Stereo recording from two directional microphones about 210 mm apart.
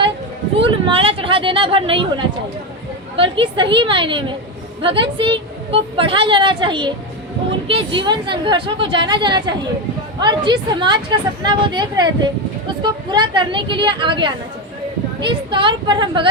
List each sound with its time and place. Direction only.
0.6 s a woman's voice: 25° right (ahead or behind)